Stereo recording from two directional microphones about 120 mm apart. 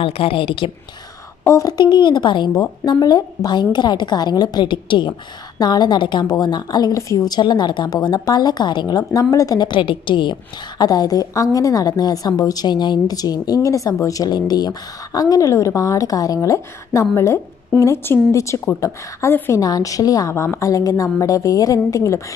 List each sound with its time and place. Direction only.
0.0 s a woman's voice: 50° left (ahead or behind)
1.4 s a woman's voice: 25° left (ahead or behind)